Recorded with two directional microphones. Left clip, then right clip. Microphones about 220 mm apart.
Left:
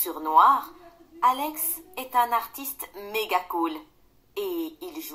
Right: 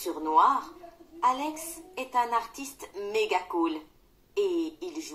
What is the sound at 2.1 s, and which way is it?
Speech, 30° left (ahead or behind).